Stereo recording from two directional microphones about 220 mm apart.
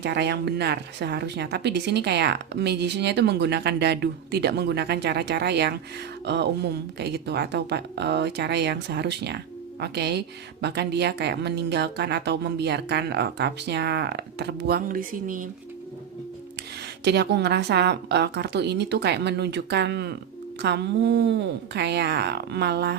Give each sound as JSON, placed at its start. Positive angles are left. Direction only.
{"t": 0.0, "sound": "speech", "side_deg": -50}
{"t": 17.0, "sound": "speech", "side_deg": -50}